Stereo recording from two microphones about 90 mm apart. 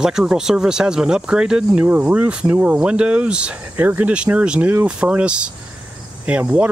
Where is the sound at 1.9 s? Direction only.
20° right (ahead or behind).